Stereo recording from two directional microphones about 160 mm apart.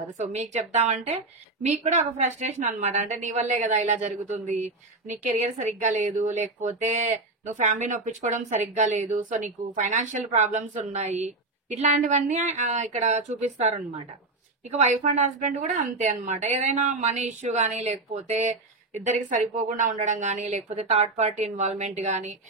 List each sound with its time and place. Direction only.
0.3 s a woman's voice: 45° right (ahead or behind)